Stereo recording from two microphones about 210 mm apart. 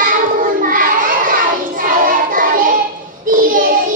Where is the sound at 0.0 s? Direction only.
40° right (ahead or behind).